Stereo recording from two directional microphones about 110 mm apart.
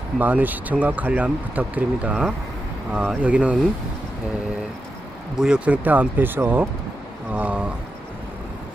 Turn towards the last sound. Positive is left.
turn(degrees=-10)  # may be behind; listen again after turning